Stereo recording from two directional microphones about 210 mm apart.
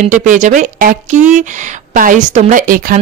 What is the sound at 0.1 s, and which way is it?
Speech, 35° right (ahead or behind).